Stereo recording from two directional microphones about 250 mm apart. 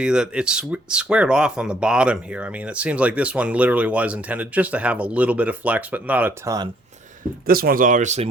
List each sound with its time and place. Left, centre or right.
0.0 s speech: centre
7.4 s speech: right